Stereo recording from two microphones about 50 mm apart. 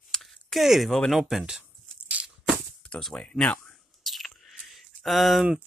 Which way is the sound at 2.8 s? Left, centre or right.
Left.